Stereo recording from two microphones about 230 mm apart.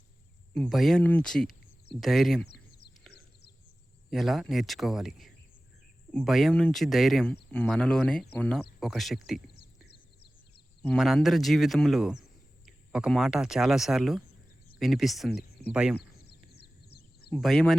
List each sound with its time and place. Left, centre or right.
0.5 s speech: centre
4.1 s speech: centre
10.9 s speech: centre
16.0 s a sound: left
17.3 s speech: centre